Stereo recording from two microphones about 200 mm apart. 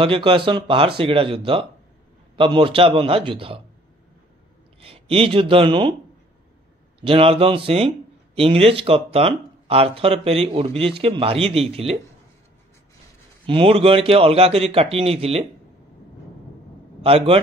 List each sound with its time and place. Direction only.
0.0 s speech: 25° right (ahead or behind)
4.8 s speech: 30° right (ahead or behind)
7.0 s speech: 30° right (ahead or behind)
13.5 s speech: 25° right (ahead or behind)
17.0 s speech: 30° right (ahead or behind)